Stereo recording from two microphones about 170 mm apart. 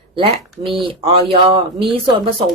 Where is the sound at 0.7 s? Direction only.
30° right (ahead or behind).